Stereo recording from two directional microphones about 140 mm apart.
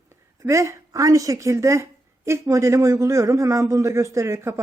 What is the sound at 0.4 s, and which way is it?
A woman's voice, 20° right (ahead or behind).